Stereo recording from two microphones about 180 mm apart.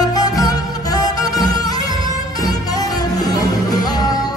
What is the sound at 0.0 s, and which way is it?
Music, 20° left (ahead or behind).